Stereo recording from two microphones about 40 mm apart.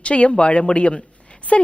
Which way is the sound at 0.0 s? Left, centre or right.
Left.